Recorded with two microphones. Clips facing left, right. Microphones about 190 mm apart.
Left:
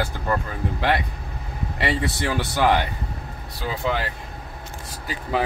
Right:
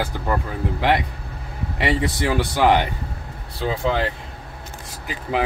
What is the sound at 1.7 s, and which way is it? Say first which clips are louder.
Speech: right 3 dB; 15° right (ahead or behind).